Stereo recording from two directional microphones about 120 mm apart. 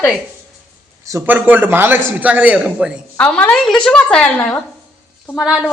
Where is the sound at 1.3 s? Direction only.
15° right (ahead or behind).